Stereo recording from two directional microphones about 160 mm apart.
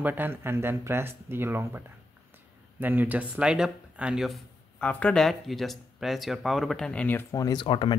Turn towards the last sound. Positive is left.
turn(degrees=30)  # may be behind; listen again after turning